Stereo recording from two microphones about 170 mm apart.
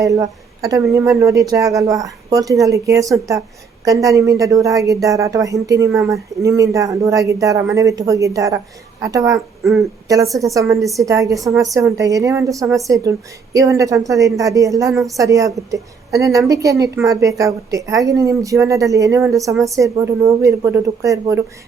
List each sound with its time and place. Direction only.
0.0 s a woman's voice: 20° right (ahead or behind)
10.4 s speech: 20° right (ahead or behind)